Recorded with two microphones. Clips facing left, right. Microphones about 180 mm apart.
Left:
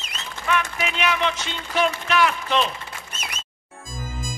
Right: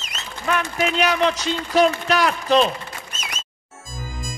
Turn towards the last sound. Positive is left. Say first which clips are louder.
# right 1 dB
turn(degrees=60)  # may be behind; listen again after turning